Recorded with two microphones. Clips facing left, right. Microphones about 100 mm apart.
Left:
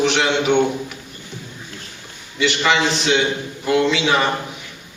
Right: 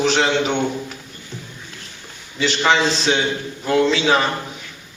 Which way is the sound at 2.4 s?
35° right (ahead or behind).